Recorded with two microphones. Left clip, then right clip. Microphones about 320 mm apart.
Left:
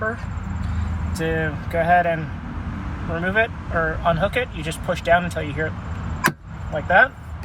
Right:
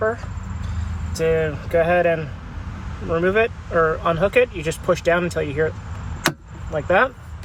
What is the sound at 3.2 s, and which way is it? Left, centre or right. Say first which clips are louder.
Speech: right 1 dB; right.